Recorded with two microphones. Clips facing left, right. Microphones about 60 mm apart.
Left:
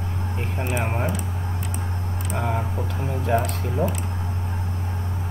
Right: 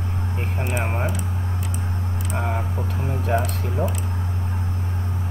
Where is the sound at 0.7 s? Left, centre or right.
Centre.